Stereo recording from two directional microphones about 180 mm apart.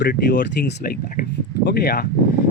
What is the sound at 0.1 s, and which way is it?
Speech, 50° left (ahead or behind).